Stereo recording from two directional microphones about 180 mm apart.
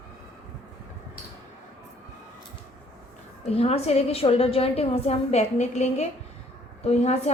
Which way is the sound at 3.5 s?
35° left (ahead or behind).